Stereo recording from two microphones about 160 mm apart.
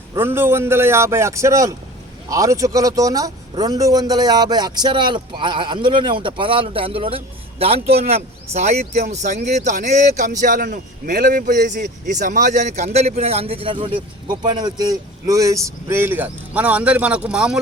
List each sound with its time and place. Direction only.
0.1 s a man's voice: 15° right (ahead or behind)